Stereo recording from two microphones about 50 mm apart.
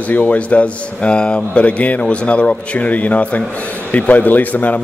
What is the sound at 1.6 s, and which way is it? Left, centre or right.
Speech, left.